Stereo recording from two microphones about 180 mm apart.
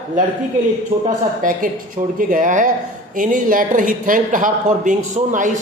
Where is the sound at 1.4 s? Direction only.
50° right (ahead or behind).